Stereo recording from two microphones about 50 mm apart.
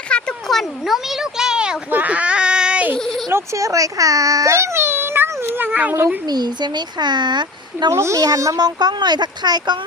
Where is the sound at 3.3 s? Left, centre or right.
Right.